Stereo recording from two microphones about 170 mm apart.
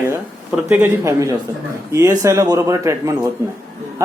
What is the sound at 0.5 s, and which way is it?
Speech, 5° right (ahead or behind).